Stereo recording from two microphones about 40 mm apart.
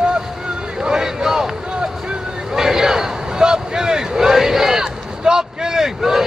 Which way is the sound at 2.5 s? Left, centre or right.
Centre.